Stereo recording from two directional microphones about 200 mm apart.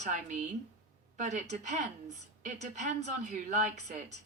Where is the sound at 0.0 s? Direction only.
40° right (ahead or behind).